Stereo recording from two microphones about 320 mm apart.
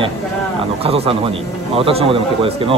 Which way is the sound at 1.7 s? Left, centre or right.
Centre.